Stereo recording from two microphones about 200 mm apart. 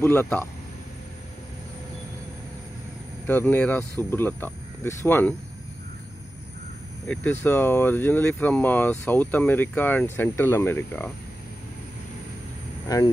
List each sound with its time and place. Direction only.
0.0 s speech: 10° left (ahead or behind)
3.3 s speech: 10° left (ahead or behind)
7.4 s speech: 10° left (ahead or behind)
12.8 s speech: 20° left (ahead or behind)